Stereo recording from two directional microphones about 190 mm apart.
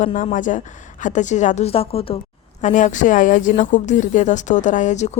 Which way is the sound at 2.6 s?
40° left (ahead or behind).